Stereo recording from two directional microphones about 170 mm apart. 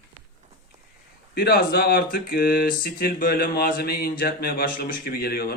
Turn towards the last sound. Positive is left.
turn(degrees=65)  # may be behind; listen again after turning